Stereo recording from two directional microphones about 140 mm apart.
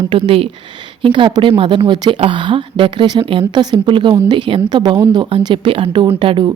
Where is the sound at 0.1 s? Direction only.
40° right (ahead or behind).